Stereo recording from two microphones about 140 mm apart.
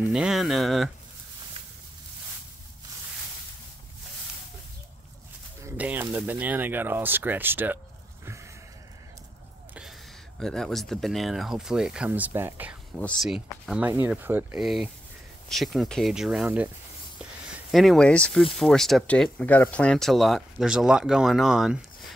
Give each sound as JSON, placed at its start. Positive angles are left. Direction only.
{"t": 0.1, "sound": "speech", "side_deg": -5}
{"t": 5.6, "sound": "speech", "side_deg": -15}
{"t": 10.4, "sound": "speech", "side_deg": 5}
{"t": 12.9, "sound": "speech", "side_deg": 5}
{"t": 14.6, "sound": "speech", "side_deg": 0}